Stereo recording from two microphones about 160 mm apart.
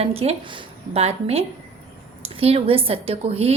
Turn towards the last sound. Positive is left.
turn(degrees=-40)  # may be behind; listen again after turning